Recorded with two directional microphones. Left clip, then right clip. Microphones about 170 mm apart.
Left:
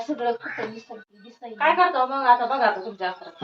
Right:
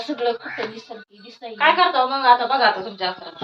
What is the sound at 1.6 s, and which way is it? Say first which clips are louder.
Speech: right 3 dB; 20° left (ahead or behind).